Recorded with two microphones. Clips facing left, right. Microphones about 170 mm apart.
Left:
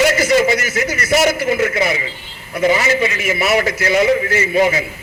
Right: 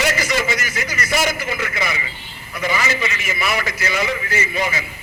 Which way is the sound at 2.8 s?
45° left (ahead or behind).